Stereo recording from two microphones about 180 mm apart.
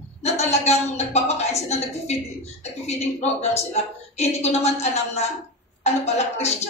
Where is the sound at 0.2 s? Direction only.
35° left (ahead or behind).